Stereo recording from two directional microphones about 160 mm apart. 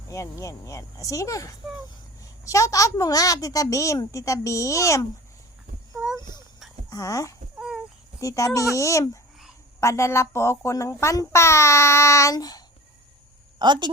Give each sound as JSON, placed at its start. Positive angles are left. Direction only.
{"t": 0.1, "sound": "speech", "side_deg": 20}
{"t": 6.0, "sound": "a sound", "side_deg": -10}
{"t": 6.9, "sound": "speech", "side_deg": 20}
{"t": 13.6, "sound": "speech", "side_deg": -30}